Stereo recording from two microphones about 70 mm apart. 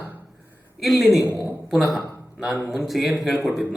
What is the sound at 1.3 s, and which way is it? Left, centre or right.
Speech, right.